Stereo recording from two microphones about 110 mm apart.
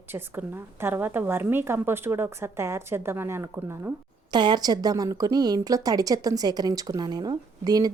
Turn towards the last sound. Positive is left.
turn(degrees=-35)  # may be behind; listen again after turning